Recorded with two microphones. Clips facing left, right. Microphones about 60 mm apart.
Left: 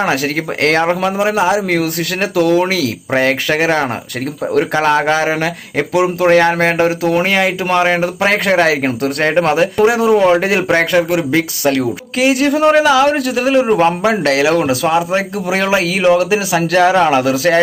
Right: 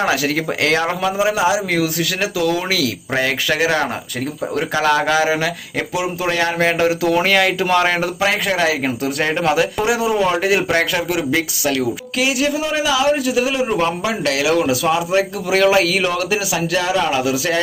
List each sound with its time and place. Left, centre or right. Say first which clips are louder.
0.1 s a man's voice: left 2 dB; left
1.3 s a man's voice: left 3 dB; left
5.9 s a man's voice: left 10 dB; left
7.2 s speech: left 1 dB; centre
8.2 s speech: left 5 dB; left
9.3 s a man's voice: left 4 dB; left
13.7 s a man's voice: left 7 dB; left